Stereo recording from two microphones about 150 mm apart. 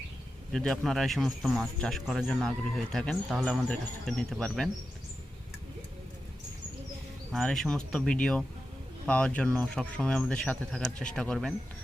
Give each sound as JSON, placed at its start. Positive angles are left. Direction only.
{"t": 0.5, "sound": "speech", "side_deg": 5}
{"t": 7.3, "sound": "speech", "side_deg": 5}